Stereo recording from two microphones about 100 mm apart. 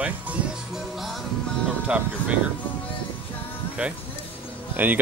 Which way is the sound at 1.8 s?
10° right (ahead or behind).